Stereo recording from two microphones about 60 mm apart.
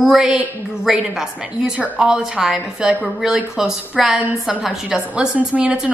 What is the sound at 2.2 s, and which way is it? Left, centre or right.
A woman's voice, centre.